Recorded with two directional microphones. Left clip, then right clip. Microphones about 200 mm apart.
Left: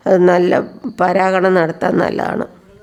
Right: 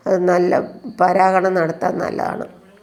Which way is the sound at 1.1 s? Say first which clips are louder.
Left 3 dB; 35° left (ahead or behind).